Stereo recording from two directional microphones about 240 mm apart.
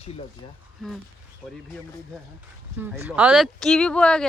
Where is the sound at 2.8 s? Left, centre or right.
Centre.